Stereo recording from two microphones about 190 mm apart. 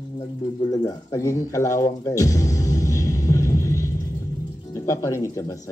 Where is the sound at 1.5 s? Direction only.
15° left (ahead or behind).